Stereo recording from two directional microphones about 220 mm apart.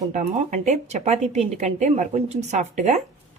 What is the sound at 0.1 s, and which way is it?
A woman's voice, 35° right (ahead or behind).